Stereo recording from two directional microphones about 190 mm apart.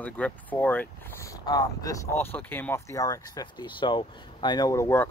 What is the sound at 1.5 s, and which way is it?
Speech, 20° left (ahead or behind).